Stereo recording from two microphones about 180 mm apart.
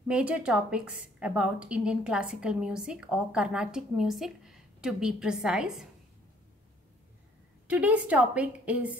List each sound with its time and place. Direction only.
0.1 s a woman's voice: 5° right (ahead or behind)
7.6 s a woman's voice: 5° right (ahead or behind)